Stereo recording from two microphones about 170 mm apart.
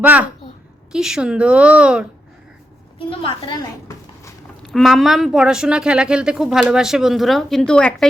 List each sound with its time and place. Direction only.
0.0 s a child's voice: 10° right (ahead or behind)
3.0 s a woman's voice: 30° left (ahead or behind)
3.8 s a sound: 15° left (ahead or behind)
4.6 s speech: centre (ahead or behind)